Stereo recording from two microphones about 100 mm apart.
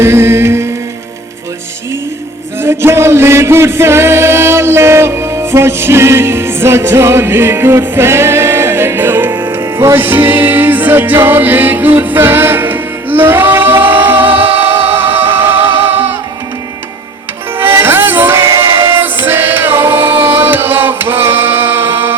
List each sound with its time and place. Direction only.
0.0 s mantra: 25° right (ahead or behind)
2.6 s music: 25° right (ahead or behind)
14.4 s music: 75° right (ahead or behind)
14.9 s music: 20° right (ahead or behind)
17.6 s music: 20° right (ahead or behind)